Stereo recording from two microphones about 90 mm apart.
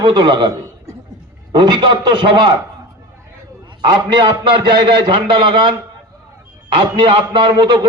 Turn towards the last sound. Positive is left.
turn(degrees=-65)  # may be behind; listen again after turning